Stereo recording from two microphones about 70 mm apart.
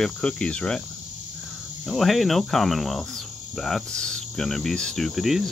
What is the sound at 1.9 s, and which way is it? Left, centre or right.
Cricket, centre.